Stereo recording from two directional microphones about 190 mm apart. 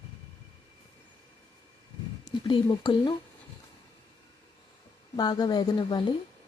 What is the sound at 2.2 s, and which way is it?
Speech, 25° left (ahead or behind).